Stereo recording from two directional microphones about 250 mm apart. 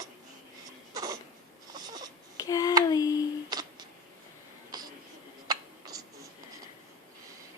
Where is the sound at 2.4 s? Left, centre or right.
Centre.